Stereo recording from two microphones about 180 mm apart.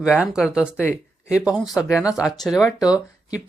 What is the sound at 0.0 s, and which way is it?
Speech, 5° right (ahead or behind).